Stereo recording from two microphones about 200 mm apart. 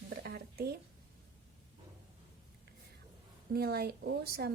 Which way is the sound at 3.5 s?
50° right (ahead or behind).